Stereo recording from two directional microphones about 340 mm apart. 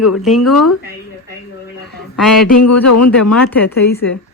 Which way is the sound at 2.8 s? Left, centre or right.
Left.